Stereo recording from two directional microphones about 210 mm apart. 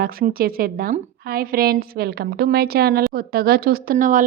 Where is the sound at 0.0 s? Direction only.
45° right (ahead or behind).